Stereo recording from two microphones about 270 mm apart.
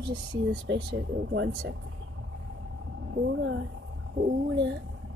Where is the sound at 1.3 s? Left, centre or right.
Right.